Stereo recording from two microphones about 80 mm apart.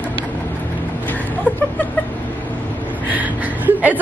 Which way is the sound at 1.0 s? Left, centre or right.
Left.